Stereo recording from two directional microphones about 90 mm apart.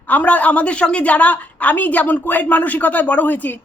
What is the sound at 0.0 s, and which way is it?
A woman's voice, 20° left (ahead or behind).